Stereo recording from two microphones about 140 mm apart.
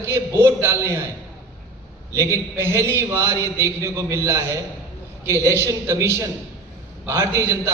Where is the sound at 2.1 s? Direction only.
20° right (ahead or behind).